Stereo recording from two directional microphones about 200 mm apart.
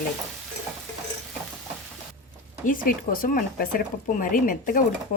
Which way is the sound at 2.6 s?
45° left (ahead or behind).